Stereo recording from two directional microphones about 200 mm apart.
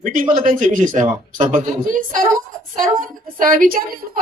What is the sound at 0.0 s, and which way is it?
Speech, 40° right (ahead or behind).